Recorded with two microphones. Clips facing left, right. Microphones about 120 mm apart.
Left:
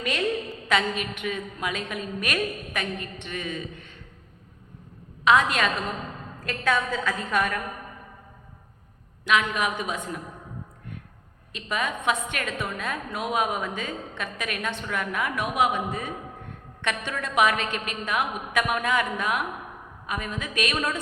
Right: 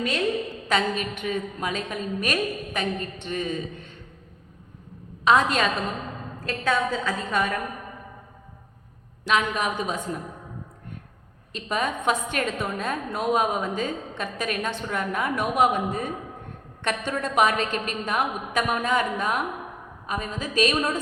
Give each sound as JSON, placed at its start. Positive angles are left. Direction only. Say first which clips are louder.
{"t": 0.7, "sound": "a woman's voice", "louder": "right 1 dB", "side_deg": -40}
{"t": 5.2, "sound": "a woman's voice", "louder": "right 1 dB", "side_deg": -35}
{"t": 9.2, "sound": "a woman's voice", "louder": "even", "side_deg": -35}
{"t": 11.5, "sound": "a woman's voice", "louder": "right 2 dB", "side_deg": -35}